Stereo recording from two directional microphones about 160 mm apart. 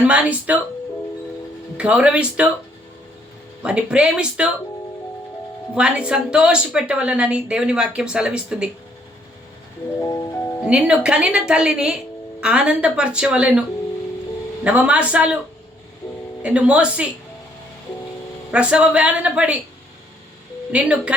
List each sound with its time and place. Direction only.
0.0 s a woman's voice: 10° right (ahead or behind)
1.8 s a woman's voice: 5° right (ahead or behind)
3.6 s a woman's voice: 5° right (ahead or behind)
5.7 s speech: 5° right (ahead or behind)
10.0 s music: 20° left (ahead or behind)
10.7 s a woman's voice: 5° right (ahead or behind)
16.4 s a woman's voice: 5° right (ahead or behind)
18.5 s a woman's voice: 5° right (ahead or behind)
20.7 s a woman's voice: 5° right (ahead or behind)